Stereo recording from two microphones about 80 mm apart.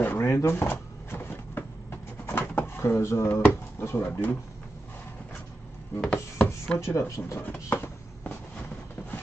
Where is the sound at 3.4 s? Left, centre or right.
Left.